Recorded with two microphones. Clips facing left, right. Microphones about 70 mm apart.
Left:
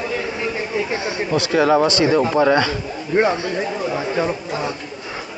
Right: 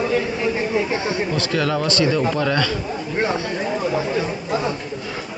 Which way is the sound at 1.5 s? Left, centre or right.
Left.